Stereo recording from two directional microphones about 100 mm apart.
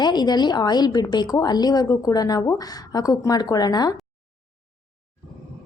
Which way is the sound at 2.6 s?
40° left (ahead or behind).